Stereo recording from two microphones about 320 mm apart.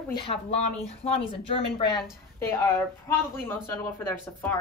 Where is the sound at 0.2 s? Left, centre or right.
Centre.